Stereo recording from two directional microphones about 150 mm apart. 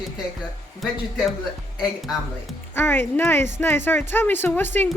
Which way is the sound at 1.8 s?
Centre (ahead or behind).